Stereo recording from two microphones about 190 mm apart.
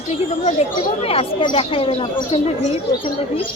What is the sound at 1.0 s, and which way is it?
Speech, 30° left (ahead or behind).